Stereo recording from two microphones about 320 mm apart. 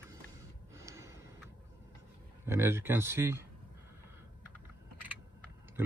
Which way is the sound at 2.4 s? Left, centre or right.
Centre.